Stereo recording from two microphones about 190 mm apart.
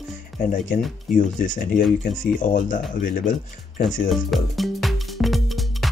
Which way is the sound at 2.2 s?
45° left (ahead or behind).